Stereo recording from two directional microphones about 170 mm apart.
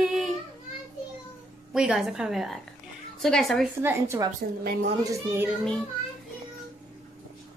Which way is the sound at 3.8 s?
15° right (ahead or behind).